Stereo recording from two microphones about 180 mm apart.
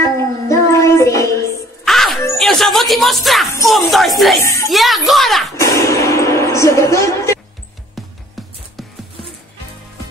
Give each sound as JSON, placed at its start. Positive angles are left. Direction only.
{"t": 0.0, "sound": "child singing", "side_deg": 15}
{"t": 1.9, "sound": "music", "side_deg": 0}
{"t": 3.9, "sound": "speech", "side_deg": 0}
{"t": 4.4, "sound": "a woman's voice", "side_deg": 15}
{"t": 4.6, "sound": "speech", "side_deg": 0}
{"t": 5.6, "sound": "a sound", "side_deg": 15}
{"t": 8.4, "sound": "music", "side_deg": 0}